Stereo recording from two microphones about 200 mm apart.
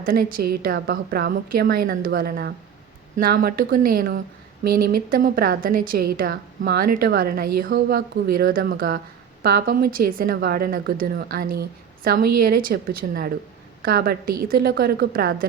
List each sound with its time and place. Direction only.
0.0 s a woman's voice: 45° right (ahead or behind)